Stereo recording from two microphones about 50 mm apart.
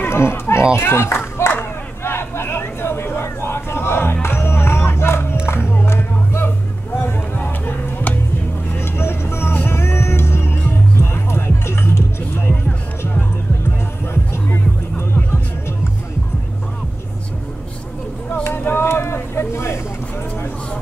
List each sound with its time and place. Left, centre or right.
0.0 s speech: left
1.5 s a sound: left
5.5 s music: left
8.7 s vehicle: left
9.7 s music: left
14.1 s music: left
18.3 s vehicle: left